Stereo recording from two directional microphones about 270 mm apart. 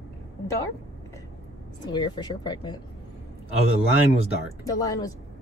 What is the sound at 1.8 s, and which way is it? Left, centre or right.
Speech, centre.